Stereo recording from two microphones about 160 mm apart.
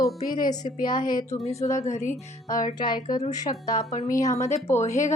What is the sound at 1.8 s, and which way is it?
Speech, 45° left (ahead or behind).